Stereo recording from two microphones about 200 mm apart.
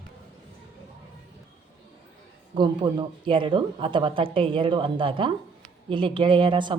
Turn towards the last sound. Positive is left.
turn(degrees=-25)  # may be behind; listen again after turning